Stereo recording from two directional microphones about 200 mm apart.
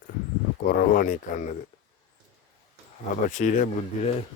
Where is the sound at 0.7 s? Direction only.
45° left (ahead or behind).